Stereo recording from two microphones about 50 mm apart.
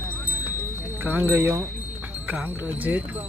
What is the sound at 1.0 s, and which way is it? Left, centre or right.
Speech, right.